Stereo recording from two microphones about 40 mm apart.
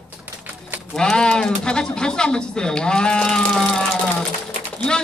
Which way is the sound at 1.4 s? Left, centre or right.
Centre.